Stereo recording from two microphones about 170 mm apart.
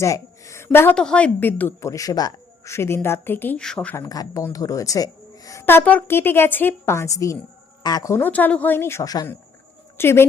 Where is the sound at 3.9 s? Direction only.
20° left (ahead or behind).